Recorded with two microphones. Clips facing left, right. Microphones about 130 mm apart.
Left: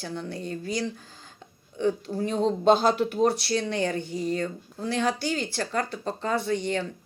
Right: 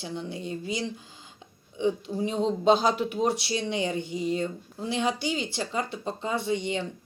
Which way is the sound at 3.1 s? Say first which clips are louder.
Left 3 dB; 15° right (ahead or behind).